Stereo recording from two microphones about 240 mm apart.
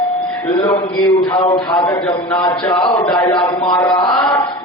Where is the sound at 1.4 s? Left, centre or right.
Left.